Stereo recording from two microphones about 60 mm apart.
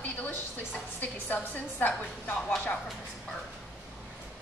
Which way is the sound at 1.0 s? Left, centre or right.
Left.